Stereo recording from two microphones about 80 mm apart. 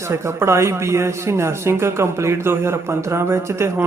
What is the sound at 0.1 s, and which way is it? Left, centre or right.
A man's voice, right.